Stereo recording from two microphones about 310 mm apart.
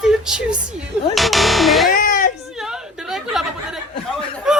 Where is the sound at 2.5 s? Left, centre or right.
Centre.